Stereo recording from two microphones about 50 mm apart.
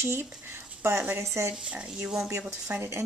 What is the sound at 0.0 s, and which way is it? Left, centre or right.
Speech, right.